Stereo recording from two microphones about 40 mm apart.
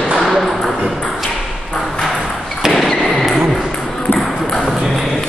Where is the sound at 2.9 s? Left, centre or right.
Centre.